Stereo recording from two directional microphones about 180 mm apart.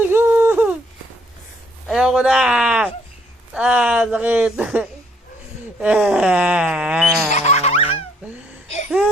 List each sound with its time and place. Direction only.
0.1 s a sound: 10° right (ahead or behind)
1.9 s speech: 5° right (ahead or behind)
7.3 s music: 40° left (ahead or behind)